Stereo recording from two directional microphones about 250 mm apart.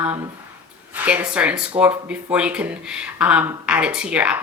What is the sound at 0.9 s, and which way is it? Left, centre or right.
Speech, centre.